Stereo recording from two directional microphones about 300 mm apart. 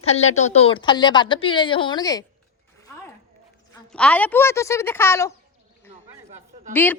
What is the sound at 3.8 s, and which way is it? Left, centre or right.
A woman's voice, centre.